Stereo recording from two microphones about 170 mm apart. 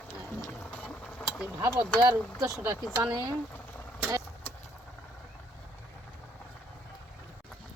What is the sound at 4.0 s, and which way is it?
Vehicle, 15° right (ahead or behind).